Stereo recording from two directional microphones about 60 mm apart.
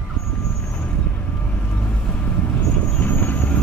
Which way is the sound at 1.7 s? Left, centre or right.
Left.